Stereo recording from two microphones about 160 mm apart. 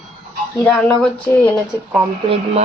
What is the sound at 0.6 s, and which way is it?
Speech, 10° left (ahead or behind).